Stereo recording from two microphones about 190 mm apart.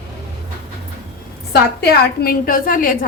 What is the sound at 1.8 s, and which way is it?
Speech, 55° left (ahead or behind).